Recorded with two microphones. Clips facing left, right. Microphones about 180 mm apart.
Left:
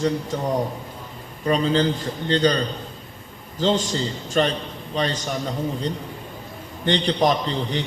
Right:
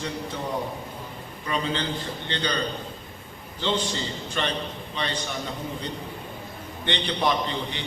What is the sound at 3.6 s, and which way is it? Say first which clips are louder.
A man's voice: left 6 dB; 40° left (ahead or behind).